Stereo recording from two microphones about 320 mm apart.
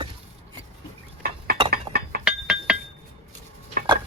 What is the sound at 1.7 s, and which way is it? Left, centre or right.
Chink, right.